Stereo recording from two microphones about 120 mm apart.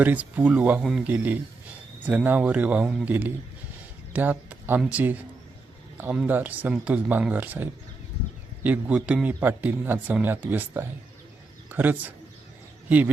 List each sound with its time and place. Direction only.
0.0 s speech: 15° right (ahead or behind)
0.8 s a man's voice: centre (ahead or behind)
1.0 s a man's voice: 15° right (ahead or behind)